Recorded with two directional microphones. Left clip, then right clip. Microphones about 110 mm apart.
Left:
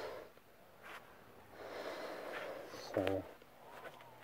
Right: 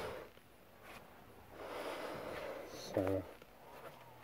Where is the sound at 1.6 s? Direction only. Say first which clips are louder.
Right 1 dB; 30° right (ahead or behind); by 3.2 s 15° right (ahead or behind).